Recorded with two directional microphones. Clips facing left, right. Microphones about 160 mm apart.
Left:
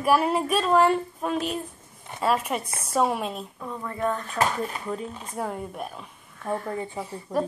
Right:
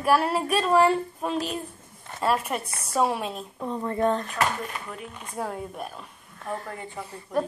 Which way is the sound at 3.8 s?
30° right (ahead or behind).